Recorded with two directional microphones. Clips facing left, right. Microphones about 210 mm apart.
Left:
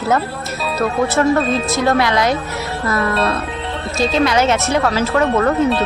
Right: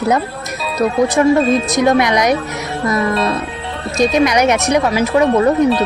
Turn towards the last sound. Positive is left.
turn(degrees=-15)  # may be behind; listen again after turning